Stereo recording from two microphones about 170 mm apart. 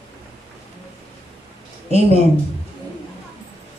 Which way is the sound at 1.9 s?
40° right (ahead or behind).